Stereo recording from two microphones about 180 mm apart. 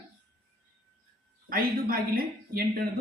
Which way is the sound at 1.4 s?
55° right (ahead or behind).